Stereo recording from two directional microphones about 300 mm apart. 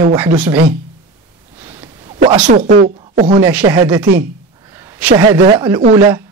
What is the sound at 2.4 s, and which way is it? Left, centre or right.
Speech, right.